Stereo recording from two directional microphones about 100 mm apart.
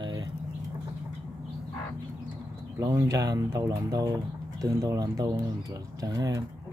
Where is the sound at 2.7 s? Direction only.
35° right (ahead or behind).